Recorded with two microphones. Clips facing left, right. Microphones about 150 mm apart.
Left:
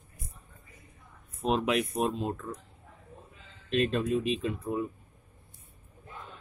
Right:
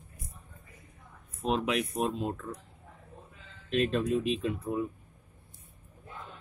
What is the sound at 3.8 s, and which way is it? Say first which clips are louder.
Speech: even; centre (ahead or behind).